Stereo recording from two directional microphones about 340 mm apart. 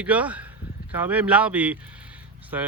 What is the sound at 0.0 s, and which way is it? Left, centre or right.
Speech, centre.